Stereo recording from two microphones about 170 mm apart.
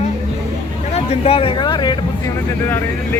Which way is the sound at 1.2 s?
35° left (ahead or behind).